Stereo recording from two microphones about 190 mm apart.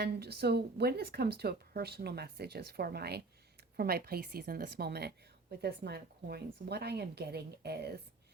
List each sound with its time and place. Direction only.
0.0 s a woman's voice: 55° right (ahead or behind)